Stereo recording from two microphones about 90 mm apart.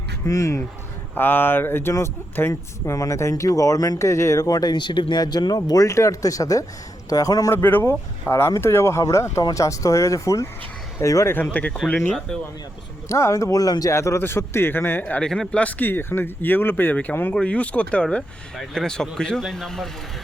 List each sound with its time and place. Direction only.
0.3 s speech: 35° left (ahead or behind)
1.1 s speech: 25° left (ahead or behind); by 7.5 s 40° left (ahead or behind)
7.5 s speech: 25° left (ahead or behind)
9.4 s speech: 45° left (ahead or behind)
11.6 s speech: 20° left (ahead or behind)
13.1 s speech: 35° left (ahead or behind)
13.9 s a man's voice: 30° left (ahead or behind); by 19.9 s centre (ahead or behind)